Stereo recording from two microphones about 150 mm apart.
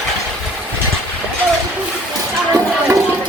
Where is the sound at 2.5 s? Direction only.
20° right (ahead or behind).